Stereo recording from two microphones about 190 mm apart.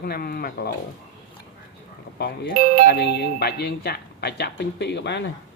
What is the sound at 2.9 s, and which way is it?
Speech, 60° left (ahead or behind).